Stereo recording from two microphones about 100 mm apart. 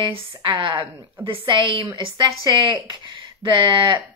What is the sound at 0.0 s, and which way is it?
A woman's voice, 60° right (ahead or behind).